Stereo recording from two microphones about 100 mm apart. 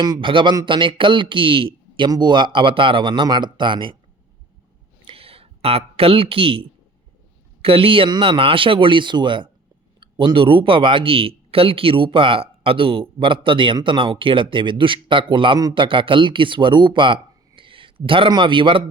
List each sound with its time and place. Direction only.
0.0 s speech: 55° right (ahead or behind)
2.0 s speech: 45° right (ahead or behind)
5.0 s a sound: 70° right (ahead or behind)
7.6 s speech: 65° right (ahead or behind)